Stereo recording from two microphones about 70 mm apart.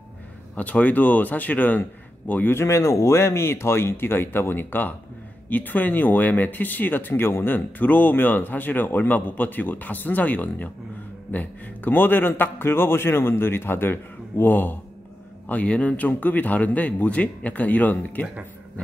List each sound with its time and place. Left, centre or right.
0.6 s speech: left
2.5 s a man's voice: left